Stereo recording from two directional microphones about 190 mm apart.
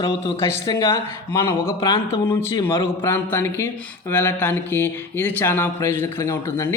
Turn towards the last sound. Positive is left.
turn(degrees=15)  # may be behind; listen again after turning